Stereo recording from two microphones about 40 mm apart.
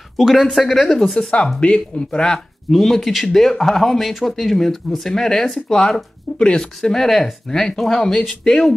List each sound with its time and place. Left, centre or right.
0.2 s speech: centre
1.6 s speech: left
2.7 s speech: centre
6.3 s speech: left
6.6 s speech: centre